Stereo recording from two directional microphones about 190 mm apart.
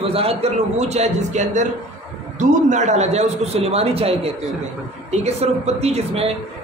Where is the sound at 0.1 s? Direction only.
30° right (ahead or behind).